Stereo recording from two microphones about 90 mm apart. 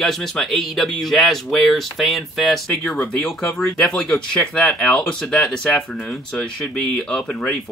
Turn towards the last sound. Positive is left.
turn(degrees=5)  # may be behind; listen again after turning